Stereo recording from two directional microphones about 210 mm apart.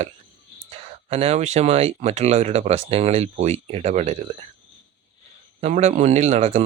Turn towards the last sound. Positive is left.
turn(degrees=-30)  # may be behind; listen again after turning